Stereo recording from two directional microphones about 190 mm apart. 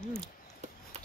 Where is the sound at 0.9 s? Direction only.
35° right (ahead or behind).